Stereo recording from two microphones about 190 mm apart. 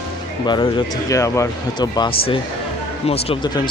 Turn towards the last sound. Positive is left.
turn(degrees=25)  # may be behind; listen again after turning